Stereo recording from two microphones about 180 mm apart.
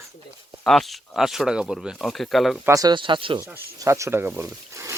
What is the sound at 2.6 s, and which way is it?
Speech, 20° right (ahead or behind).